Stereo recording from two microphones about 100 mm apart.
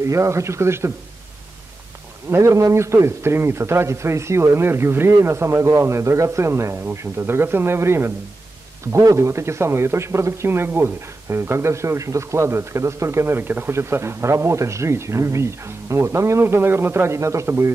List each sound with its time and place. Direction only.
0.0 s speech: 30° right (ahead or behind)
2.2 s speech: 30° right (ahead or behind)